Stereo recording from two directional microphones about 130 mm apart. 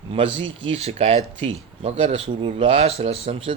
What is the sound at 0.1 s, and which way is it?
Speech, 45° right (ahead or behind).